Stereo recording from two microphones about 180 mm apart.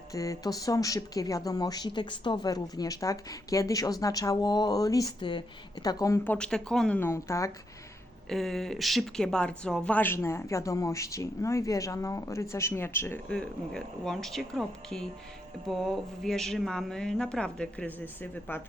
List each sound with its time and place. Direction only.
0.1 s speech: 20° left (ahead or behind)
6.3 s a woman's voice: 5° left (ahead or behind)
8.3 s a woman's voice: centre (ahead or behind)